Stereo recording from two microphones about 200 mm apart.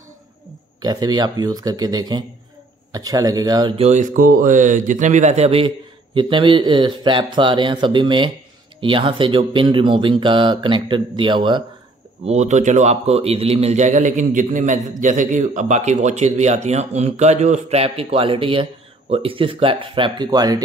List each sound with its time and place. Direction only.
0.8 s a man's voice: 20° right (ahead or behind)
12.3 s a man's voice: 35° right (ahead or behind); by 20.6 s 20° right (ahead or behind)